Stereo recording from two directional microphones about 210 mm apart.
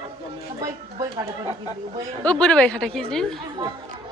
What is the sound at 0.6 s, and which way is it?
Speech, 20° right (ahead or behind).